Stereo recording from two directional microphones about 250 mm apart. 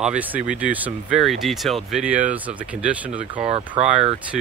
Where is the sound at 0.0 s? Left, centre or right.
Centre.